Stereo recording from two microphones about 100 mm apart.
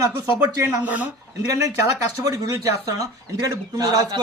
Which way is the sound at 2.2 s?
35° right (ahead or behind).